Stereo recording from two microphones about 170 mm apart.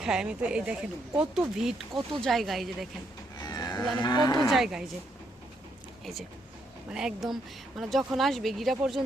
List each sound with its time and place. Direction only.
0.0 s speech: 5° right (ahead or behind)
3.3 s livestock: 20° left (ahead or behind)
4.0 s speech: 25° left (ahead or behind)
4.5 s speech: centre (ahead or behind)
6.9 s speech: centre (ahead or behind)